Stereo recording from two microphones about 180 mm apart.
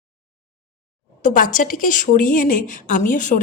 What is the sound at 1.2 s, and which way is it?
A woman's voice, 45° left (ahead or behind).